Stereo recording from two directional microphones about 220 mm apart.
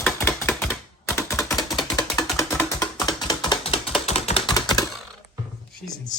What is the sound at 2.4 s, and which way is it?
Music, 10° left (ahead or behind).